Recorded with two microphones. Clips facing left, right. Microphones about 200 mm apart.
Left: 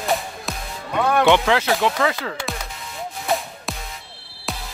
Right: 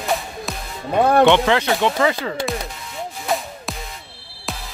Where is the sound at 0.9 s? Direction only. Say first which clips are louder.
Right 5 dB; 40° right (ahead or behind).